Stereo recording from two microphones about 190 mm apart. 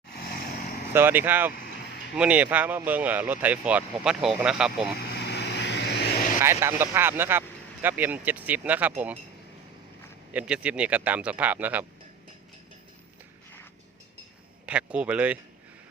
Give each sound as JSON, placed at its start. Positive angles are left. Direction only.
{"t": 0.1, "sound": "vehicle", "side_deg": 55}
{"t": 0.9, "sound": "speech", "side_deg": -10}
{"t": 4.9, "sound": "vehicle", "side_deg": 60}
{"t": 6.4, "sound": "speech", "side_deg": -15}
{"t": 10.3, "sound": "speech", "side_deg": -5}
{"t": 14.7, "sound": "speech", "side_deg": -5}